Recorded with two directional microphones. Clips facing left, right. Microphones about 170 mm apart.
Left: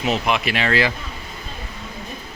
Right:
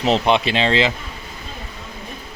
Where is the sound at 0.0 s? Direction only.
30° right (ahead or behind).